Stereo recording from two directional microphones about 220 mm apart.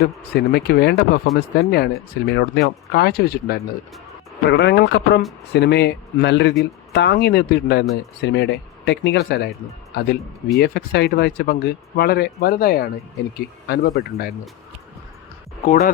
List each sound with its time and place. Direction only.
0.3 s speech: 45° left (ahead or behind)
15.6 s speech: 40° left (ahead or behind)